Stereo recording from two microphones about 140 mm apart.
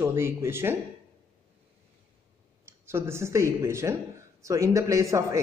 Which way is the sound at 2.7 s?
20° right (ahead or behind).